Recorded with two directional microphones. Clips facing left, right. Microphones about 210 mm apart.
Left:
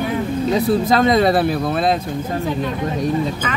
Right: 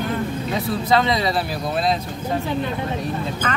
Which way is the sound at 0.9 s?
50° left (ahead or behind).